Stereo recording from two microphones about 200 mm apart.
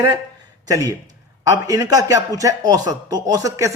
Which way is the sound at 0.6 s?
15° right (ahead or behind).